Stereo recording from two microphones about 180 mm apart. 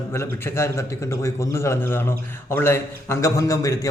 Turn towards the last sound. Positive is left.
turn(degrees=20)  # may be behind; listen again after turning